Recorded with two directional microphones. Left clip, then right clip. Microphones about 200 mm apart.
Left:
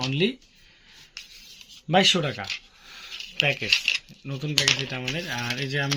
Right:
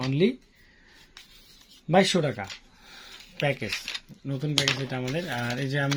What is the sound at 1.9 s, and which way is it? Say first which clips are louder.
Speech: left 2 dB; 10° right (ahead or behind).